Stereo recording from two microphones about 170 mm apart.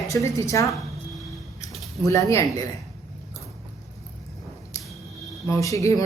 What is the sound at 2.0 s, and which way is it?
Speech, 20° left (ahead or behind).